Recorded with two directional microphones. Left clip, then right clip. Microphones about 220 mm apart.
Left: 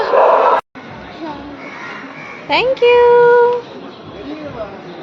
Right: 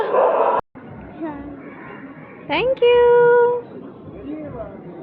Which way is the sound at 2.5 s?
15° left (ahead or behind).